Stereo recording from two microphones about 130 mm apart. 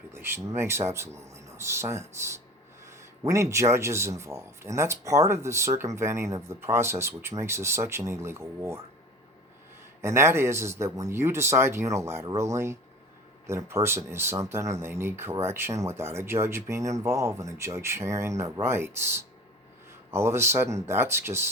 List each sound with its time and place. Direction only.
0.1 s a man's voice: 20° right (ahead or behind)
10.0 s a man's voice: 20° right (ahead or behind)